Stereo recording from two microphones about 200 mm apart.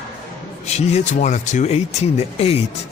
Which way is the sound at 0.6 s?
35° left (ahead or behind).